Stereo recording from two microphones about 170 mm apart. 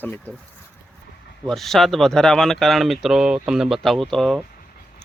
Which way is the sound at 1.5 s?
Centre (ahead or behind).